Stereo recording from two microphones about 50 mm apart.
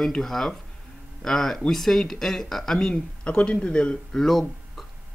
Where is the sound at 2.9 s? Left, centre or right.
Left.